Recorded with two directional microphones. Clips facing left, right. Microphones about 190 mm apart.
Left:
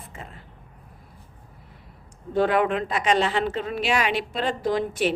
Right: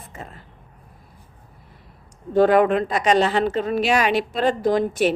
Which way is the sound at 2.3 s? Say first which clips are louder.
Right 6 dB; 45° right (ahead or behind).